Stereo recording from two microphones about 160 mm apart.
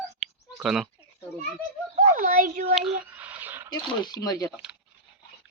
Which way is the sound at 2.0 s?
55° right (ahead or behind).